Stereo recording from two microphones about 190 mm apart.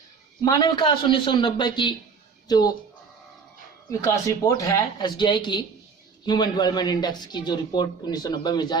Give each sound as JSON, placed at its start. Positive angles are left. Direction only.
{"t": 0.4, "sound": "speech", "side_deg": 25}
{"t": 3.9, "sound": "speech", "side_deg": 15}